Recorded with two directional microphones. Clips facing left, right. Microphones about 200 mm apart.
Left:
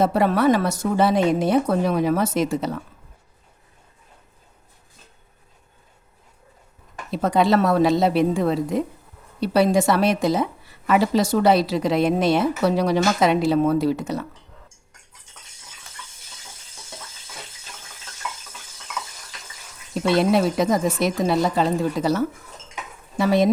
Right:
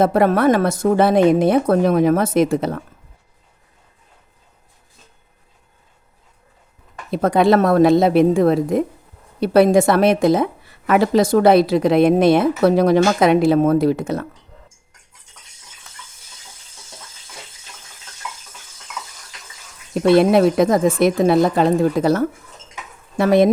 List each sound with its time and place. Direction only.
0.0 s a woman's voice: 55° right (ahead or behind)
7.1 s a woman's voice: 55° right (ahead or behind)
20.0 s a woman's voice: 55° right (ahead or behind)